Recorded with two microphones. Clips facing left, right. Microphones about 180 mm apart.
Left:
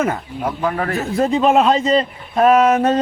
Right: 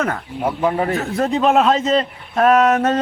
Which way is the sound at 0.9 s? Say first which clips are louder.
Left 2 dB; centre (ahead or behind).